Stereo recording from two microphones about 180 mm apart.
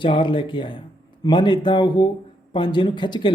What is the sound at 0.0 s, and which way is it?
A man's voice, 25° left (ahead or behind).